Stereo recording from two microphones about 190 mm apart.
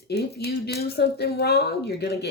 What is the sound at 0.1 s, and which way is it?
Speech, 60° left (ahead or behind).